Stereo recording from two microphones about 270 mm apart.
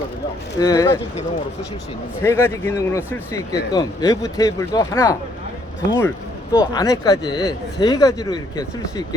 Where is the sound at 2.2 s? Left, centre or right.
Centre.